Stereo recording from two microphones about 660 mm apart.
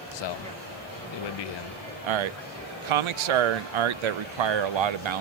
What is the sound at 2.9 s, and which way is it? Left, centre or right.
Speech, right.